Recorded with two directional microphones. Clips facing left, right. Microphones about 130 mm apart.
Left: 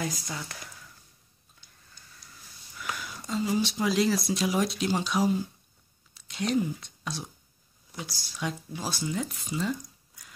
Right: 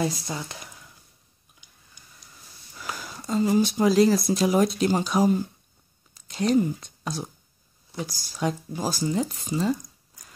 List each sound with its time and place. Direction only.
0.0 s speech: 30° right (ahead or behind)
1.5 s a sound: 15° right (ahead or behind)
2.8 s speech: 35° right (ahead or behind)